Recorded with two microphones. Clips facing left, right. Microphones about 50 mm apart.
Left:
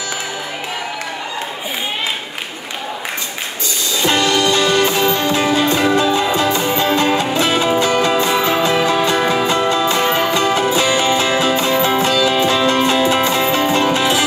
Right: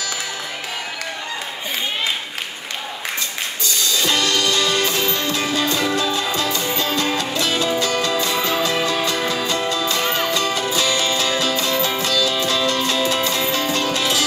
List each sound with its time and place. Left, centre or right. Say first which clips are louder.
4.0 s music: left 6 dB; left